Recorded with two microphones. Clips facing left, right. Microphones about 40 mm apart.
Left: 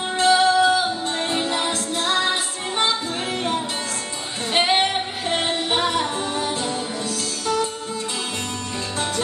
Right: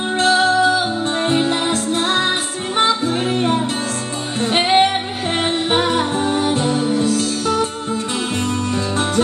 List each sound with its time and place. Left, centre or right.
0.2 s music: right
1.2 s music: right
3.3 s music: right
5.9 s music: right